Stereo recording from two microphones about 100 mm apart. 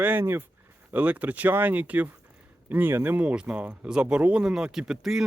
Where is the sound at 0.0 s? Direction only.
20° right (ahead or behind).